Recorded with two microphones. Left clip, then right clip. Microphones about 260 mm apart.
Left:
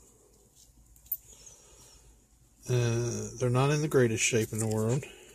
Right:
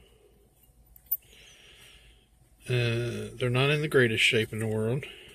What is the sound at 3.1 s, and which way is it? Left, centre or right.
Speech, left.